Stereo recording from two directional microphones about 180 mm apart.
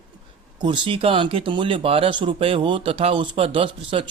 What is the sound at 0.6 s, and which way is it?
Speech, 25° right (ahead or behind).